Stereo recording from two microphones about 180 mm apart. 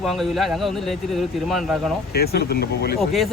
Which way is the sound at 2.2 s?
60° left (ahead or behind).